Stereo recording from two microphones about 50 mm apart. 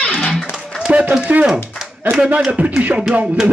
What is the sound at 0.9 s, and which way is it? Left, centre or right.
Run, right.